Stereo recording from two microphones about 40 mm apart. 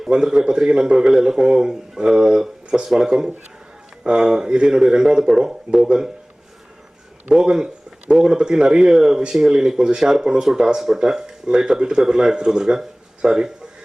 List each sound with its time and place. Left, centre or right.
0.1 s speech: centre
7.3 s speech: centre